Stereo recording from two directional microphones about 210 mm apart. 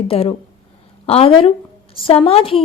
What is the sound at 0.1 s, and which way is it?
A woman's voice, 30° left (ahead or behind).